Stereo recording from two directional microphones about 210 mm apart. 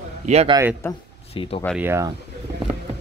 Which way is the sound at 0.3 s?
30° right (ahead or behind).